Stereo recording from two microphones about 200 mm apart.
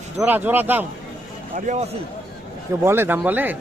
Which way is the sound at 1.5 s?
40° right (ahead or behind).